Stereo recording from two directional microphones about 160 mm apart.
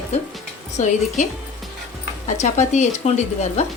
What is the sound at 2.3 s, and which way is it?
A woman's voice, 50° left (ahead or behind).